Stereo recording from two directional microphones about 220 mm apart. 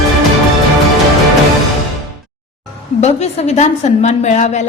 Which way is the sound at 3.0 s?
30° left (ahead or behind).